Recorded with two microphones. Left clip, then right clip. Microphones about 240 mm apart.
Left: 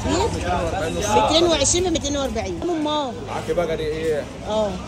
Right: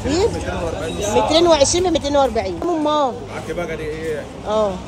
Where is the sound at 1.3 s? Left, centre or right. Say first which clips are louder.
Right 4 dB; right.